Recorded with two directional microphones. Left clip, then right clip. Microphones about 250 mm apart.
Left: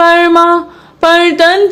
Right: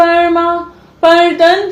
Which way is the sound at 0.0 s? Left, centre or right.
Left.